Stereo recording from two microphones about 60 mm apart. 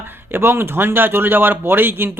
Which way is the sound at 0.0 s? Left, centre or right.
Right.